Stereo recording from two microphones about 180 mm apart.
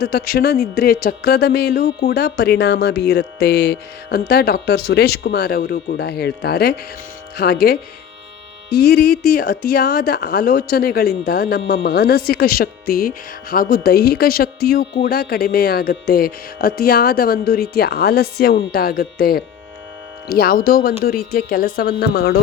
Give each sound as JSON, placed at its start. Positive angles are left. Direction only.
{"t": 0.0, "sound": "speech", "side_deg": 60}